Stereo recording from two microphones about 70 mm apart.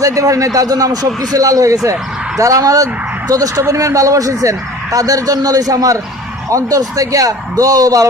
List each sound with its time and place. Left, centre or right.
0.0 s speech: right